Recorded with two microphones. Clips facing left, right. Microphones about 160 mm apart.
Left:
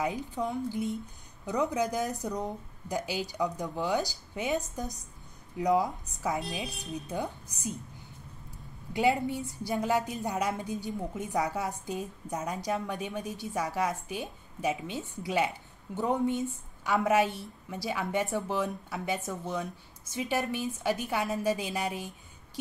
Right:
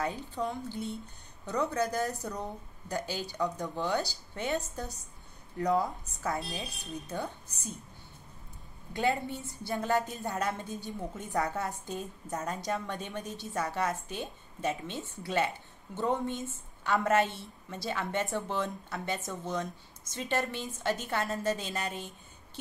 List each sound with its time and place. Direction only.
0.0 s a woman's voice: 10° left (ahead or behind)
5.6 s a woman's voice: 15° left (ahead or behind)
8.9 s a woman's voice: 15° left (ahead or behind)
10.3 s a woman's voice: centre (ahead or behind)
10.6 s a woman's voice: 10° left (ahead or behind)